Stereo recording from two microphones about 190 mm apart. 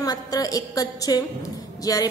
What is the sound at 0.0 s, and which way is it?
A woman's voice, 20° left (ahead or behind).